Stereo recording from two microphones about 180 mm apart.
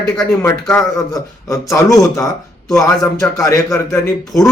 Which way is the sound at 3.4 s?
15° left (ahead or behind).